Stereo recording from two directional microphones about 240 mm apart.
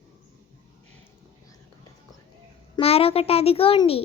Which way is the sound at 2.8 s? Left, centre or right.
Left.